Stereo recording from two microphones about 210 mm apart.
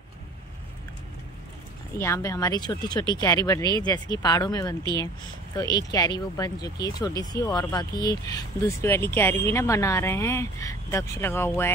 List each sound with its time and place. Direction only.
2.0 s speech: 10° left (ahead or behind)